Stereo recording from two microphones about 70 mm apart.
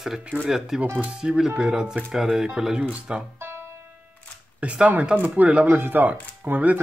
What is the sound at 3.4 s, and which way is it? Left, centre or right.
Music, right.